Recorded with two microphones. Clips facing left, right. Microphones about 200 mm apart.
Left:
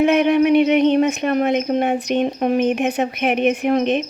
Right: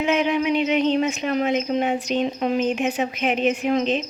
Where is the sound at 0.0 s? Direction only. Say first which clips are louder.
Left 6 dB; 60° left (ahead or behind).